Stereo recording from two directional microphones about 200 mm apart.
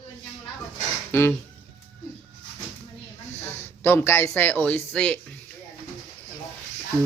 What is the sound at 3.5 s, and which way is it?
Speech, 10° left (ahead or behind).